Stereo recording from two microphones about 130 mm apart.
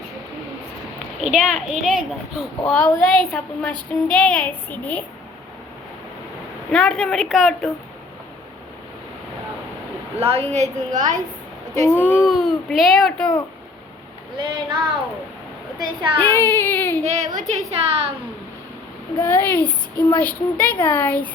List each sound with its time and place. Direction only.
1.2 s speech: 5° right (ahead or behind)
2.6 s a woman's voice: 10° left (ahead or behind)
6.7 s speech: 5° left (ahead or behind)
10.2 s a woman's voice: 50° right (ahead or behind); by 11.2 s 75° right (ahead or behind)
11.9 s a woman's voice: 15° left (ahead or behind)
12.1 s speech: centre (ahead or behind)
14.3 s speech: 35° right (ahead or behind)
16.1 s a woman's voice: 15° left (ahead or behind)
17.0 s a woman's voice: 60° right (ahead or behind)
19.2 s a woman's voice: 15° left (ahead or behind)